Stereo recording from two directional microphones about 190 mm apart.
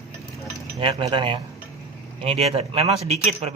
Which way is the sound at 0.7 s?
30° right (ahead or behind).